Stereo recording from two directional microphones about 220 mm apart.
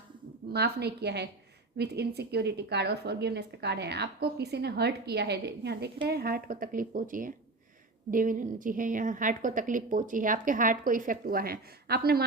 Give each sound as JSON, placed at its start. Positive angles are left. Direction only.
{"t": 0.5, "sound": "a woman's voice", "side_deg": -50}